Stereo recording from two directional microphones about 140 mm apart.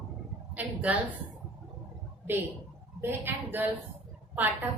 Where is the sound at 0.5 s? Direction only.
10° right (ahead or behind).